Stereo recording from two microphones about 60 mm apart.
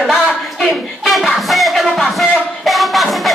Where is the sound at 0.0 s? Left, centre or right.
Centre.